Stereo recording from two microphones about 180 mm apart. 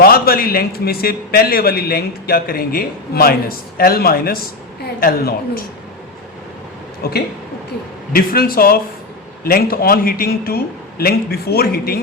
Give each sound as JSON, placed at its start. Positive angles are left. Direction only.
{"t": 0.0, "sound": "a man's voice", "side_deg": 55}
{"t": 7.0, "sound": "a man's voice", "side_deg": 60}